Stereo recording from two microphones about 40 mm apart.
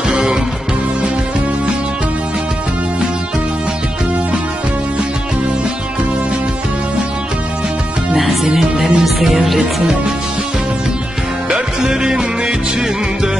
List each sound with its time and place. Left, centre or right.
8.5 s music: centre
9.6 s music: centre
11.9 s music: centre